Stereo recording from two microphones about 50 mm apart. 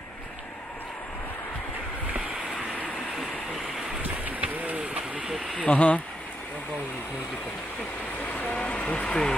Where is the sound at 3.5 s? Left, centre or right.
Centre.